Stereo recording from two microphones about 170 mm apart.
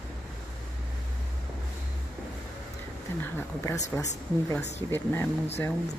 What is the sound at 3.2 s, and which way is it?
Speech, 15° left (ahead or behind).